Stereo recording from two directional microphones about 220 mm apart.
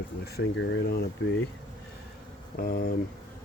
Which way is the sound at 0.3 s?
50° left (ahead or behind).